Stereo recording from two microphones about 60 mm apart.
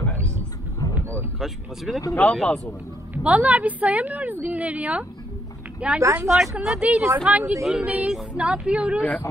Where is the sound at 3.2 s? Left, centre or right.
Right.